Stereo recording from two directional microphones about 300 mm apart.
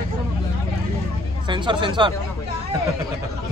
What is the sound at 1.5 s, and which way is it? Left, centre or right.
Speech, centre.